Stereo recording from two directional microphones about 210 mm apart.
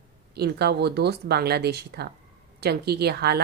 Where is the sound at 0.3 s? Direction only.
50° right (ahead or behind).